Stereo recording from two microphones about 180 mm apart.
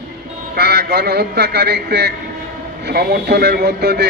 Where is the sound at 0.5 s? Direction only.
60° right (ahead or behind).